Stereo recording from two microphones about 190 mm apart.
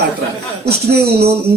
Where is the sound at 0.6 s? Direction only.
60° right (ahead or behind).